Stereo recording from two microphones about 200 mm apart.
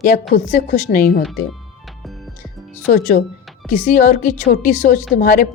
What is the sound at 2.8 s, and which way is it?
A woman's voice, 40° left (ahead or behind).